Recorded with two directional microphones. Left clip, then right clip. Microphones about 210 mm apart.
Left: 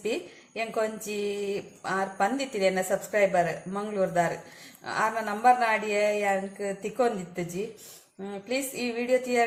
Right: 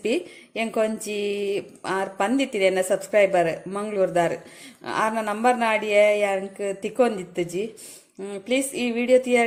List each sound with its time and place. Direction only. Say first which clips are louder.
0.0 s a woman's voice: right 6 dB; 40° right (ahead or behind)